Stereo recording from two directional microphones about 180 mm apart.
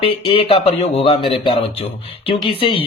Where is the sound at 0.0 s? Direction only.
30° left (ahead or behind).